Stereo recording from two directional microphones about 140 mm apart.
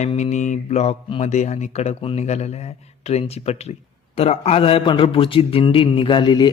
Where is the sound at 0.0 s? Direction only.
55° left (ahead or behind).